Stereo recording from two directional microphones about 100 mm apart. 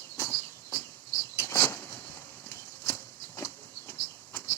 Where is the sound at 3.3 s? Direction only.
30° left (ahead or behind).